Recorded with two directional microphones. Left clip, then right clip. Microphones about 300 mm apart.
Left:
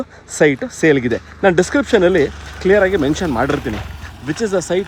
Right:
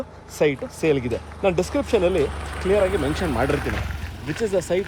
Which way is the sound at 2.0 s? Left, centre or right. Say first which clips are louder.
Left 8 dB; left.